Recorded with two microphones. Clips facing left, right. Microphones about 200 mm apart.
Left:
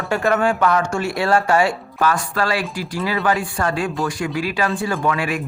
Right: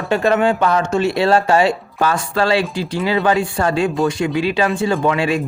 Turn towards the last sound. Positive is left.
turn(degrees=-25)  # may be behind; listen again after turning